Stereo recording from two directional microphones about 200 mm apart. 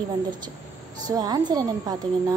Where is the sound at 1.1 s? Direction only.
20° right (ahead or behind).